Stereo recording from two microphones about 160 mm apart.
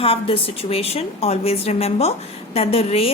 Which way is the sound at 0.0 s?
35° left (ahead or behind).